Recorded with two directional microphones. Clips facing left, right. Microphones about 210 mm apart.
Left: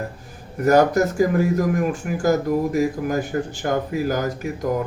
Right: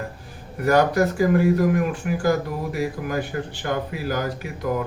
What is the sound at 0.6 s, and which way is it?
Speech, 45° left (ahead or behind).